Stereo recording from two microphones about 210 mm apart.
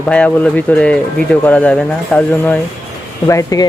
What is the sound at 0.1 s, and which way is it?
Speech, 5° left (ahead or behind).